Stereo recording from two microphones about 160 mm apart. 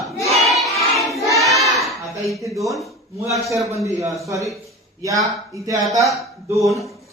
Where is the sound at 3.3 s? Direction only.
20° right (ahead or behind).